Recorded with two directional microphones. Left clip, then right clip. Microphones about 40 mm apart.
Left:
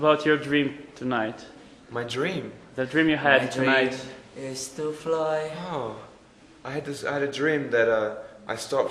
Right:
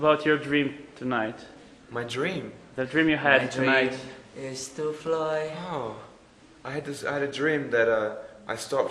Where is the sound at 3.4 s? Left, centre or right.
Right.